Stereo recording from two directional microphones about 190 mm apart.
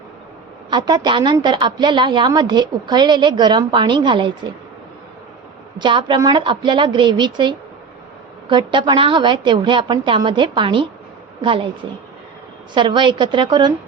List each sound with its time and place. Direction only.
0.7 s a woman's voice: 25° right (ahead or behind)
5.8 s a woman's voice: 25° right (ahead or behind)
12.7 s a woman's voice: 25° right (ahead or behind)